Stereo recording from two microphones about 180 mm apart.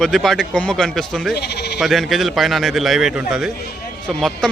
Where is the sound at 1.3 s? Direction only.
65° left (ahead or behind).